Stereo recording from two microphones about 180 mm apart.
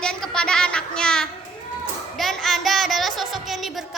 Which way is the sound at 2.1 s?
Centre (ahead or behind).